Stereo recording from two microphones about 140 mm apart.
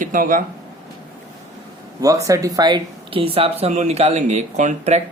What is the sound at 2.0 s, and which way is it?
Speech, 25° right (ahead or behind).